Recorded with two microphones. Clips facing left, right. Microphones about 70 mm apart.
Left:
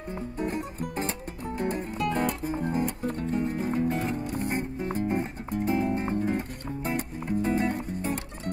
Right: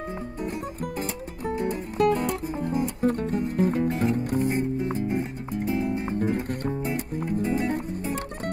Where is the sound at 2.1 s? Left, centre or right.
Left.